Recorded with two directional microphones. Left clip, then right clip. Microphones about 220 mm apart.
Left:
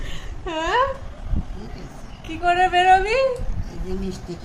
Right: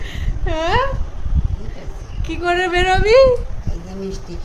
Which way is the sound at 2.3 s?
20° right (ahead or behind).